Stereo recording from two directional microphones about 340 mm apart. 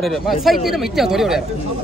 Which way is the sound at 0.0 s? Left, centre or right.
Centre.